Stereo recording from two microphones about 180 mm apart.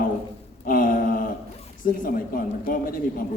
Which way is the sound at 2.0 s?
50° left (ahead or behind).